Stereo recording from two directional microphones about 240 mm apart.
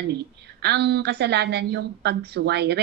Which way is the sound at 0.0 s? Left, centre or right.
Right.